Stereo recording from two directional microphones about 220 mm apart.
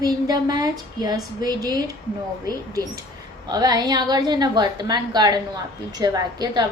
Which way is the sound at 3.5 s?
15° right (ahead or behind).